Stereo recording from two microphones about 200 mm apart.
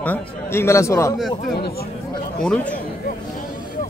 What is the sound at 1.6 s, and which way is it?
Speech, 55° left (ahead or behind).